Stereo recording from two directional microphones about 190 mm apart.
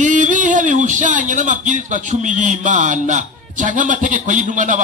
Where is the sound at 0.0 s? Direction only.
40° right (ahead or behind).